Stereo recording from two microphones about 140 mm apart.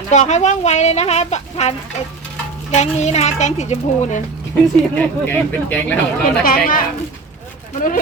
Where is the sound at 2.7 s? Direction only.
55° left (ahead or behind).